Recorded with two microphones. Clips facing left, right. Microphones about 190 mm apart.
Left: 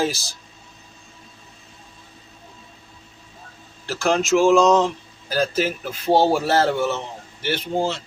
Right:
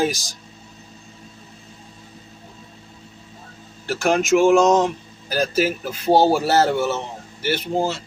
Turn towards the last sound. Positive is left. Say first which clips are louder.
# right 1 dB
turn(degrees=-10)  # may be behind; listen again after turning